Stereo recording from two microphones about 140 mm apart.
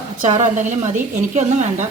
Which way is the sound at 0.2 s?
60° right (ahead or behind).